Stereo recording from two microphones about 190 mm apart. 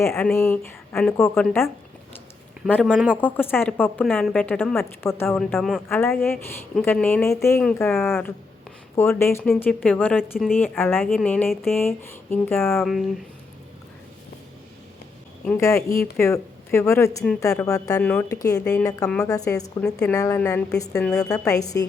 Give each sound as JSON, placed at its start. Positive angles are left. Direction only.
{"t": 0.0, "sound": "speech", "side_deg": 15}
{"t": 2.6, "sound": "speech", "side_deg": 10}
{"t": 2.9, "sound": "a woman's voice", "side_deg": 0}
{"t": 3.2, "sound": "speech", "side_deg": 10}
{"t": 5.4, "sound": "a woman's voice", "side_deg": 0}
{"t": 7.9, "sound": "a woman's voice", "side_deg": 0}
{"t": 9.0, "sound": "a woman's voice", "side_deg": 15}
{"t": 12.7, "sound": "a woman's voice", "side_deg": 0}
{"t": 15.4, "sound": "speech", "side_deg": 15}
{"t": 19.8, "sound": "a woman's voice", "side_deg": 5}
{"t": 20.1, "sound": "speech", "side_deg": 15}
{"t": 20.4, "sound": "speech", "side_deg": 5}
{"t": 20.7, "sound": "speech", "side_deg": 15}